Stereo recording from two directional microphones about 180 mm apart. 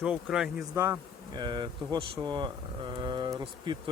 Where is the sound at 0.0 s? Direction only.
5° right (ahead or behind).